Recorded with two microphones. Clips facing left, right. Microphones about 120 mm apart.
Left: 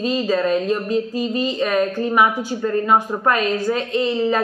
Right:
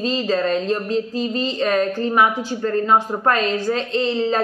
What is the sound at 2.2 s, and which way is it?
Speech, 10° left (ahead or behind).